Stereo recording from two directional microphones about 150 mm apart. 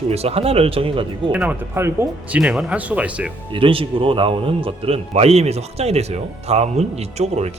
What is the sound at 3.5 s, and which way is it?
A man's voice, 35° right (ahead or behind).